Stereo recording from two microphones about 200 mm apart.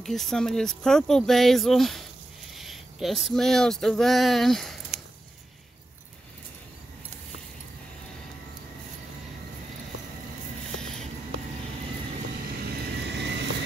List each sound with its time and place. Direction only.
0.0 s speech: centre (ahead or behind)
13.0 s vehicle: 60° right (ahead or behind)